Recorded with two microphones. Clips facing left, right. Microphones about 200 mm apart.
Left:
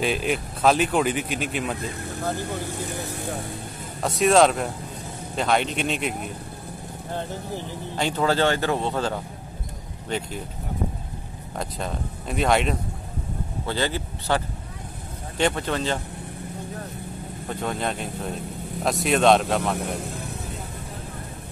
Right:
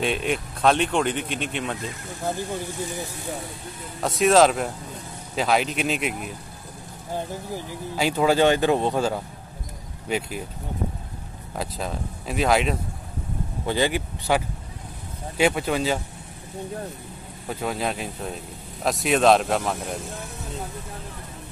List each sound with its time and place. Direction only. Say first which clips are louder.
0.0 s speech: even; centre (ahead or behind)
2.6 s speech: even; 60° left (ahead or behind)
4.0 s speech: even; centre (ahead or behind)
7.9 s speech: right 2 dB; 10° right (ahead or behind)
11.5 s speech: even; 5° right (ahead or behind)
13.7 s speech: right 3 dB; 15° right (ahead or behind)
17.5 s speech: right 1 dB; 5° right (ahead or behind)